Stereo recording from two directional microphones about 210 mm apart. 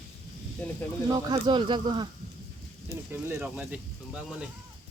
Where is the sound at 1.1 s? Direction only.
20° right (ahead or behind).